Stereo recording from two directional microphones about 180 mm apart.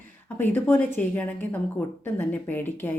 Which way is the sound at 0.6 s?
10° left (ahead or behind).